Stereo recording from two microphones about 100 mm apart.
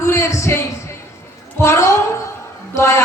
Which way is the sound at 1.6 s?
30° left (ahead or behind).